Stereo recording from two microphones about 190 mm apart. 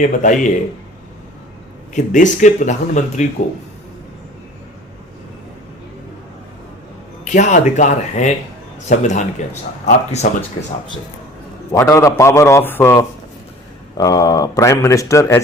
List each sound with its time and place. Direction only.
0.0 s speech: 40° left (ahead or behind)
1.9 s speech: 40° left (ahead or behind)
7.3 s speech: 40° left (ahead or behind)
11.7 s speech: 15° left (ahead or behind)